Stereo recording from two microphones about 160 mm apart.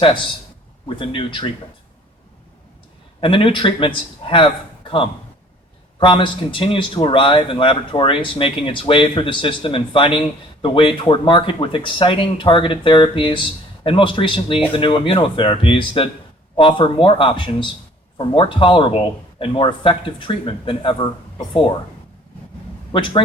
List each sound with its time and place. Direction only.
0.0 s a man's voice: 30° left (ahead or behind)
3.2 s a man's voice: 35° left (ahead or behind)
6.0 s a man's voice: 30° left (ahead or behind)
22.9 s a man's voice: 30° left (ahead or behind)